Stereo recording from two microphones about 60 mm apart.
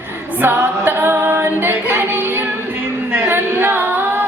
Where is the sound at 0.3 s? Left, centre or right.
Right.